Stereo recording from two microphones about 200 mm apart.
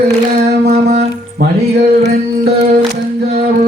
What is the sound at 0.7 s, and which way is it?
Music, 50° right (ahead or behind).